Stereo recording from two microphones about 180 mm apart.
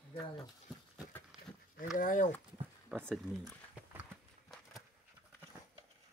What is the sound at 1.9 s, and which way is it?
Speech, 45° left (ahead or behind).